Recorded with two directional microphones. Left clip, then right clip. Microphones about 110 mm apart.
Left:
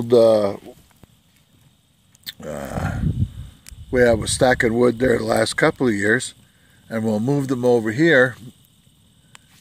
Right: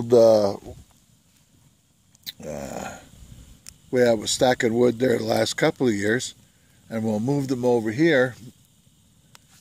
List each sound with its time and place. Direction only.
0.0 s speech: 20° right (ahead or behind)
2.2 s a sound: centre (ahead or behind)
3.6 s speech: centre (ahead or behind)